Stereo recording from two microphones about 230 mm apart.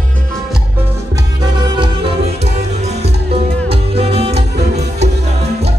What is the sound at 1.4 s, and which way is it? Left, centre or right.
Music, centre.